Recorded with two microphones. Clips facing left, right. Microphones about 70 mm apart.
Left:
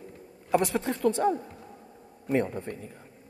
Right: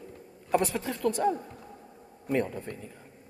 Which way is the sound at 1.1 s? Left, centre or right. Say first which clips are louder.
Left 1 dB; left.